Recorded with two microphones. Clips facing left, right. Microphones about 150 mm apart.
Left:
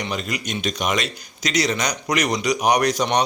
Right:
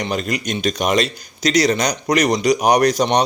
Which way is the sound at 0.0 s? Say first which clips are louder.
Right 5 dB; 40° right (ahead or behind).